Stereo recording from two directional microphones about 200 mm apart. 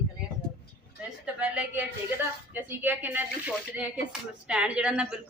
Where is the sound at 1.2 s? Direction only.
5° right (ahead or behind).